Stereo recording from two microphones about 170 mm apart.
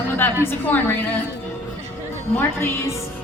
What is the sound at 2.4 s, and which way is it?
Speech, 15° left (ahead or behind).